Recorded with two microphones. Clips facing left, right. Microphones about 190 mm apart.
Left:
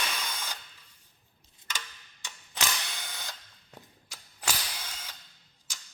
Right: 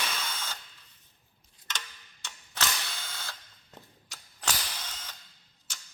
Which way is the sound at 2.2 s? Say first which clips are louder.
Even; 15° left (ahead or behind).